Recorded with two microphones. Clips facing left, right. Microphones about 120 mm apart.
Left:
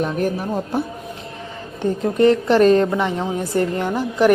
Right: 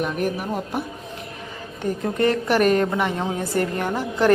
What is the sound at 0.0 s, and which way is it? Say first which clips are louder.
Speech: left 3 dB; 30° left (ahead or behind).